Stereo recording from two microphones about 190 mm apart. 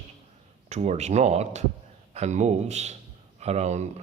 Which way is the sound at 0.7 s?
35° right (ahead or behind).